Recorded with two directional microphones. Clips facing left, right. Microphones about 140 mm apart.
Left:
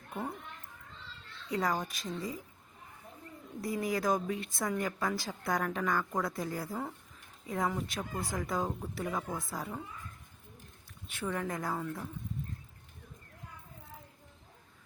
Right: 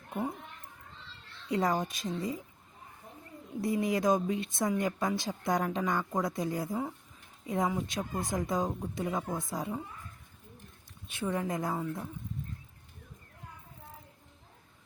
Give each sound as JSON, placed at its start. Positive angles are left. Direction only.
{"t": 1.5, "sound": "a woman's voice", "side_deg": -25}
{"t": 3.6, "sound": "a woman's voice", "side_deg": -25}
{"t": 11.1, "sound": "a woman's voice", "side_deg": -15}